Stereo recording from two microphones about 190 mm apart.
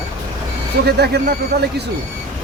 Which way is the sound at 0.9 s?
60° right (ahead or behind).